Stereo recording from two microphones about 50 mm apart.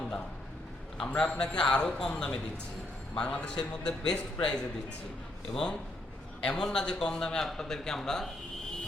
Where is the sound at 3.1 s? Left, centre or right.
Centre.